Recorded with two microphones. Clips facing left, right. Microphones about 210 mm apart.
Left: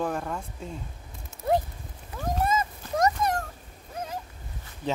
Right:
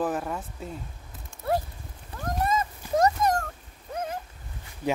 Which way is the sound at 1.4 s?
20° left (ahead or behind).